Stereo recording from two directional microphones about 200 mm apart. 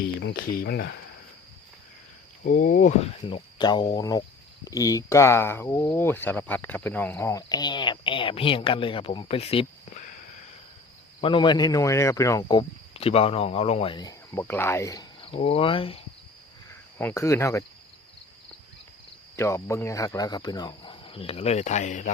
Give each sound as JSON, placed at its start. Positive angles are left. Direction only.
{"t": 0.0, "sound": "speech", "side_deg": 55}
{"t": 2.4, "sound": "speech", "side_deg": 40}
{"t": 3.2, "sound": "speech", "side_deg": 25}
{"t": 11.2, "sound": "speech", "side_deg": 25}
{"t": 15.2, "sound": "speech", "side_deg": 30}
{"t": 16.6, "sound": "cricket", "side_deg": 10}
{"t": 19.4, "sound": "speech", "side_deg": 15}